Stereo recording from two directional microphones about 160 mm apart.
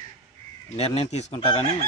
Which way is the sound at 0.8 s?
40° left (ahead or behind).